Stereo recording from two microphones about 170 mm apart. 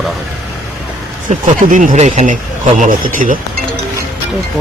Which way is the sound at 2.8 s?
55° right (ahead or behind).